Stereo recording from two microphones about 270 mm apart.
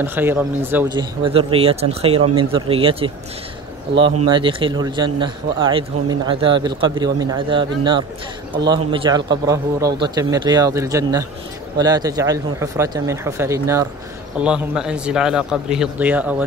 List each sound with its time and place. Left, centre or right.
0.0 s speech: centre
4.3 s a man's voice: centre